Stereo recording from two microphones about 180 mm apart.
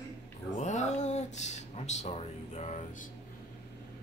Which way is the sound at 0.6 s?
40° left (ahead or behind).